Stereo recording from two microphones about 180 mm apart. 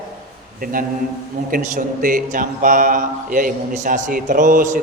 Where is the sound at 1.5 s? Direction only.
50° right (ahead or behind).